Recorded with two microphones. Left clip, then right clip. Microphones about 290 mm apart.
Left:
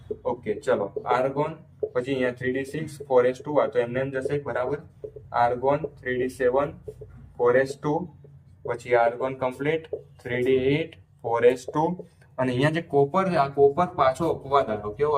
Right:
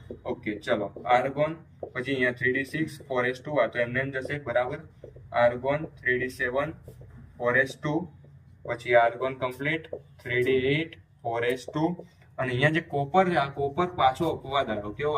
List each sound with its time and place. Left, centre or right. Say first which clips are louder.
0.4 s speech: left 3 dB; centre